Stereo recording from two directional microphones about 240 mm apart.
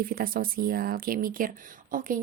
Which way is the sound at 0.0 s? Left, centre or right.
Right.